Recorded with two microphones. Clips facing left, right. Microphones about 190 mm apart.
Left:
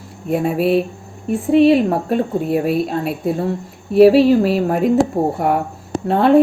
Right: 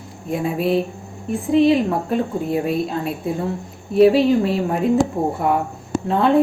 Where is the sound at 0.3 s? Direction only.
70° left (ahead or behind).